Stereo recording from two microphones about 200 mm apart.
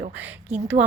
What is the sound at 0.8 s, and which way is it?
Speech, 35° right (ahead or behind).